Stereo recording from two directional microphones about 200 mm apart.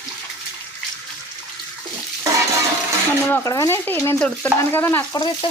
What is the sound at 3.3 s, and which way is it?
Speech, 15° left (ahead or behind).